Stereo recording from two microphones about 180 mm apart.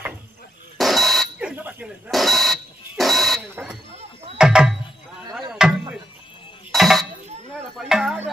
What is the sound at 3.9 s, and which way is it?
Music, 35° right (ahead or behind).